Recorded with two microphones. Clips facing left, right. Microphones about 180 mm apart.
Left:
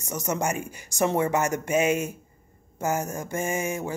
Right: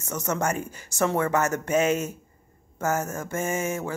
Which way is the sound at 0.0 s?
10° left (ahead or behind).